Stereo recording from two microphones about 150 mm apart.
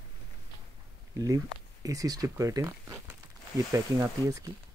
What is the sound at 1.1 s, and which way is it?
Speech, 20° right (ahead or behind).